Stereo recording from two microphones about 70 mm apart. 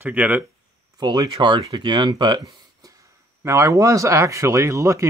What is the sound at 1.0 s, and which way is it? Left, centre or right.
Speech, right.